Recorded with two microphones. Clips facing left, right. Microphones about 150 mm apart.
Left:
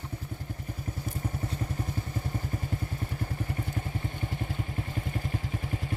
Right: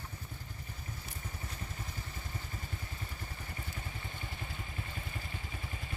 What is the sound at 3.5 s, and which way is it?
Vehicle, 55° left (ahead or behind).